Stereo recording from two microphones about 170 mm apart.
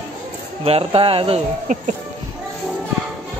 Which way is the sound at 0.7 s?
35° right (ahead or behind).